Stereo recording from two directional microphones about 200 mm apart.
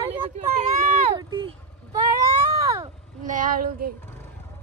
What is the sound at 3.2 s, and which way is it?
Child singing, 40° right (ahead or behind).